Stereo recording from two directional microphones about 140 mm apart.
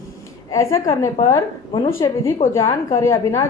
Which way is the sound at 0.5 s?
20° left (ahead or behind).